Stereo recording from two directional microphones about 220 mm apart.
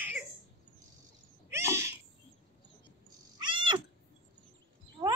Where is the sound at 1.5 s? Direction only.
10° right (ahead or behind).